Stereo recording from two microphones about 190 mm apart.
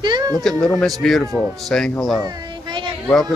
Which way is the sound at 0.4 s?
Centre (ahead or behind).